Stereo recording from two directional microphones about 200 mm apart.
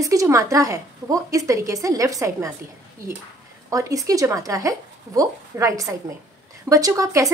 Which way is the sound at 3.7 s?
15° right (ahead or behind).